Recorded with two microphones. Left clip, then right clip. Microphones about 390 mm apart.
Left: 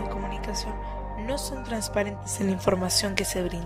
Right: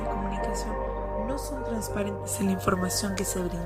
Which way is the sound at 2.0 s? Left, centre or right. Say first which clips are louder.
Left 3 dB; centre.